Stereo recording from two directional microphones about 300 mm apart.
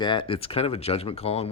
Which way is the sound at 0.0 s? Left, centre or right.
Centre.